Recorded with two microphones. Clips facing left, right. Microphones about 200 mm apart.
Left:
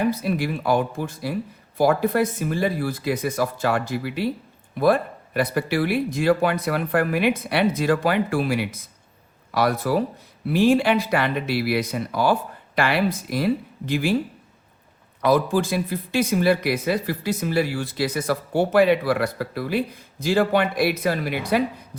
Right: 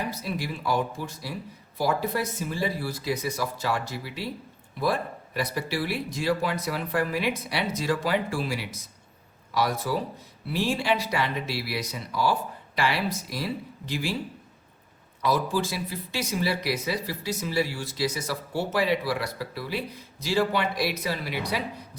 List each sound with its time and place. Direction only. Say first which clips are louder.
0.1 s speech: left 8 dB; 55° left (ahead or behind)
15.2 s speech: left 6 dB; 55° left (ahead or behind)